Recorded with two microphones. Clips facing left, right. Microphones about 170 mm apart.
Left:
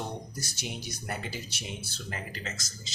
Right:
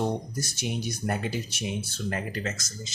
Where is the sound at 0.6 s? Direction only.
55° right (ahead or behind).